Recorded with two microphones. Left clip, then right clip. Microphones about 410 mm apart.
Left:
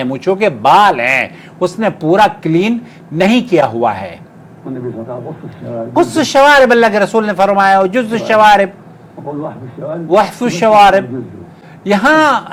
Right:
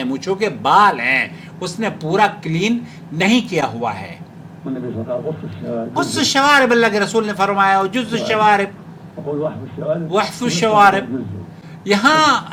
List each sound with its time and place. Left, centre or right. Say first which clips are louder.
0.0 s a man's voice: left 7 dB; left
5.9 s a man's voice: left 7 dB; left
10.1 s a man's voice: left 12 dB; left